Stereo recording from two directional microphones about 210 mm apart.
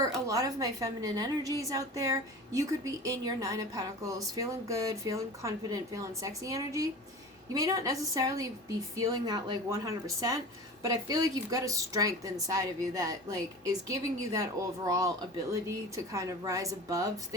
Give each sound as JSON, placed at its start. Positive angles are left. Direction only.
{"t": 0.0, "sound": "a woman's voice", "side_deg": -15}
{"t": 16.1, "sound": "a woman's voice", "side_deg": -15}